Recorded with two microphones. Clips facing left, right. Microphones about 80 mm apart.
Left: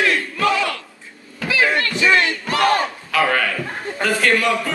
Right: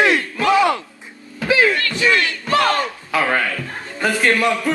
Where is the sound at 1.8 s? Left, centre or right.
Left.